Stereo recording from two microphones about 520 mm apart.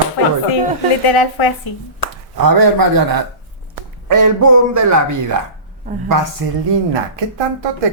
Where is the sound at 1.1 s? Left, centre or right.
Left.